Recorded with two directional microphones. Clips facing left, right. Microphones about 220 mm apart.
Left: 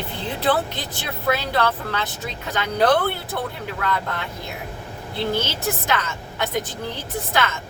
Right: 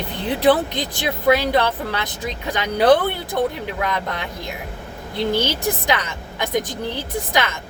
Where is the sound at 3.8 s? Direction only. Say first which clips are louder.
Right 1 dB; 15° right (ahead or behind).